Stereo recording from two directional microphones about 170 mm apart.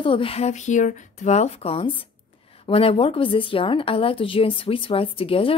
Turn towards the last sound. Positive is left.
turn(degrees=35)  # may be behind; listen again after turning